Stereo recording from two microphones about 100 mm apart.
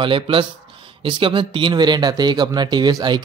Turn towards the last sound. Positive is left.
turn(degrees=-45)  # may be behind; listen again after turning